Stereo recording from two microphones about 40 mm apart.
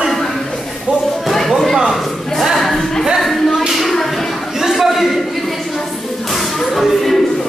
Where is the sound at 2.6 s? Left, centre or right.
Centre.